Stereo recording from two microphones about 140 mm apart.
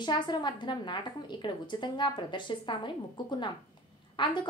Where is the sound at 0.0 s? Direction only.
30° left (ahead or behind).